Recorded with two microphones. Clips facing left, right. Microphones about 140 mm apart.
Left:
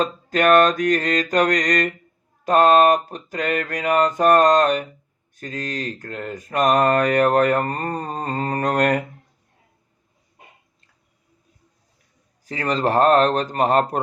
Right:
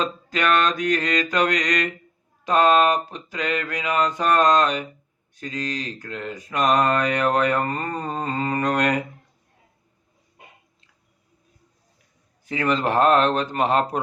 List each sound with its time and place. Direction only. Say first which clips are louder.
0.0 s mantra: left 5 dB; 45° left (ahead or behind)
12.5 s a man's voice: left 1 dB; 35° left (ahead or behind)